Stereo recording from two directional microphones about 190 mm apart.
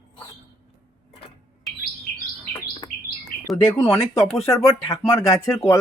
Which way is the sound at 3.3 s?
50° left (ahead or behind).